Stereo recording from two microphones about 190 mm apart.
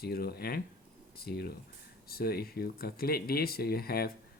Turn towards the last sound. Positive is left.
turn(degrees=55)  # may be behind; listen again after turning